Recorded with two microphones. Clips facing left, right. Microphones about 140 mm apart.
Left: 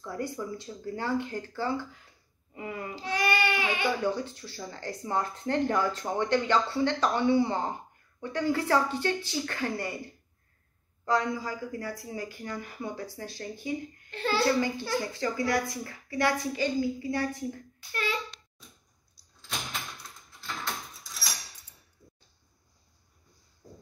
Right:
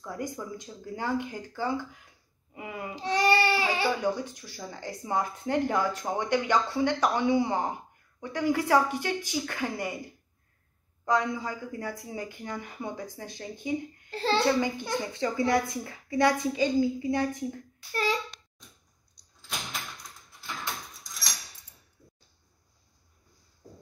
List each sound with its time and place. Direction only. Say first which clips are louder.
0.0 s speech: left 1 dB; 15° right (ahead or behind)
3.3 s baby cry: right 3 dB; 35° right (ahead or behind)
4.0 s a child's voice: even; 15° right (ahead or behind)
17.9 s a child's voice: right 4 dB; 35° right (ahead or behind)
19.2 s door: even; 5° left (ahead or behind)
21.0 s a sound: even; 5° left (ahead or behind)